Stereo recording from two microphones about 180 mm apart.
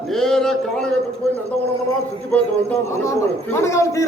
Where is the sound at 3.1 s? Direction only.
15° left (ahead or behind).